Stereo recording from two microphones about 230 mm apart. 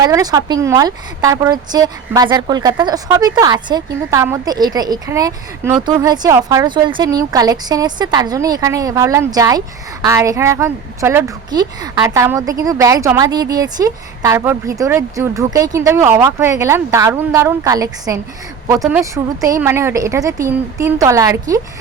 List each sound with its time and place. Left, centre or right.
0.0 s a woman's voice: centre